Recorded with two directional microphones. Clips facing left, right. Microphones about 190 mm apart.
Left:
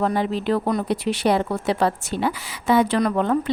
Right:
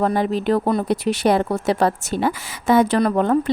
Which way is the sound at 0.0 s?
45° right (ahead or behind).